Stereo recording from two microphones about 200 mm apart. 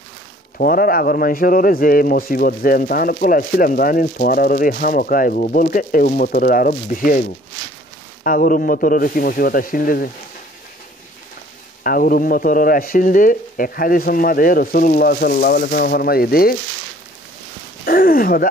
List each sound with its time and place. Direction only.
0.6 s speech: 45° left (ahead or behind)
11.8 s speech: 45° left (ahead or behind)
17.8 s speech: 45° left (ahead or behind)